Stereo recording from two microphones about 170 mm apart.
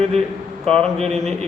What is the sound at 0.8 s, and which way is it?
Speech, 40° right (ahead or behind).